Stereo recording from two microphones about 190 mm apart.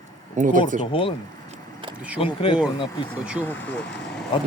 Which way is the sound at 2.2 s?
30° left (ahead or behind).